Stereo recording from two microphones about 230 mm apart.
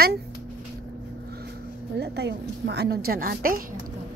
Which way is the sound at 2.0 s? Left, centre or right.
Right.